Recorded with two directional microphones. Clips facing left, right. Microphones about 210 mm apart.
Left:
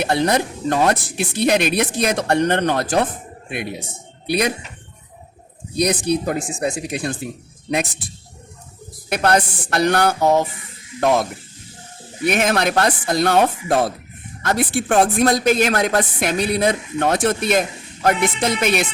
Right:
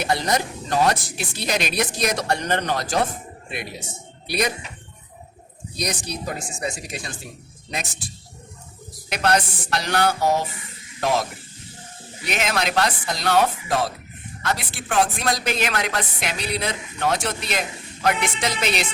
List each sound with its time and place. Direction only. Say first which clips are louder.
0.0 s speech: left 5 dB; 60° left (ahead or behind)
5.7 s speech: left 10 dB; 60° left (ahead or behind)
9.1 s speech: left 4 dB; 55° left (ahead or behind)